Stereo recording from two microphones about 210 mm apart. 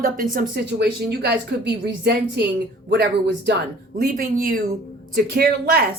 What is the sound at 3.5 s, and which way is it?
Speech, 55° right (ahead or behind).